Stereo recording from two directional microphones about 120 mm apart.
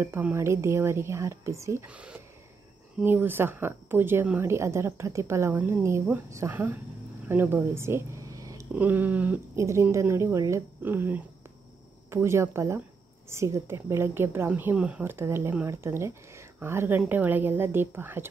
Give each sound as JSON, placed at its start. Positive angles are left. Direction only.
{"t": 0.0, "sound": "a woman's voice", "side_deg": -20}
{"t": 1.9, "sound": "a woman's voice", "side_deg": -10}
{"t": 8.7, "sound": "a woman's voice", "side_deg": -15}
{"t": 9.6, "sound": "a woman's voice", "side_deg": -25}